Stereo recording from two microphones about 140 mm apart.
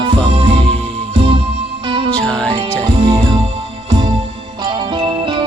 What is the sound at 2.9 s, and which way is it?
Music, 35° right (ahead or behind).